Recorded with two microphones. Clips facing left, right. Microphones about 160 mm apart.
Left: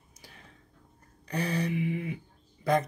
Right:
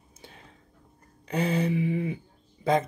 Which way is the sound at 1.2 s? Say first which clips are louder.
Right 4 dB; 25° right (ahead or behind).